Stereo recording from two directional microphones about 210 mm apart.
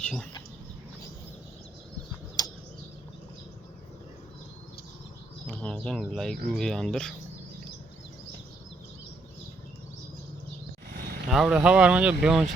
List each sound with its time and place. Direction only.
0.0 s speech: 5° left (ahead or behind)
2.4 s a sound: 15° left (ahead or behind)
5.5 s speech: 5° left (ahead or behind)
11.3 s speech: centre (ahead or behind)